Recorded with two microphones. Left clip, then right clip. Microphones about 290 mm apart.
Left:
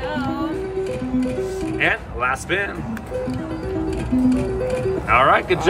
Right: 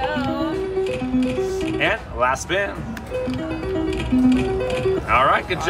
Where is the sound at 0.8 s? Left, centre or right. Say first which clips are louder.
Right 1 dB; centre.